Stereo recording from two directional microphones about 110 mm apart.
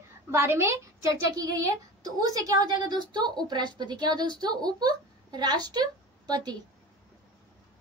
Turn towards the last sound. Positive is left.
turn(degrees=-40)  # may be behind; listen again after turning